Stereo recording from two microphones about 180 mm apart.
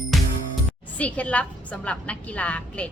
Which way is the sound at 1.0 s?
5° left (ahead or behind).